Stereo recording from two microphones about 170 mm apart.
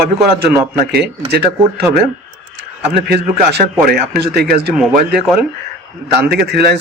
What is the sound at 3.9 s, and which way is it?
Speech, 65° right (ahead or behind).